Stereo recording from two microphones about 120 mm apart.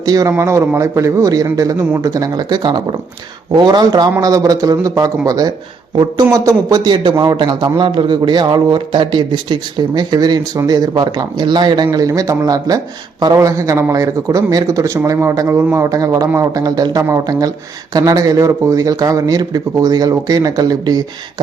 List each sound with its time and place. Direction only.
0.0 s a man's voice: 30° right (ahead or behind)